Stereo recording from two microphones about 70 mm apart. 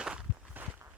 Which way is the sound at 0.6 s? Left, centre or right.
Right.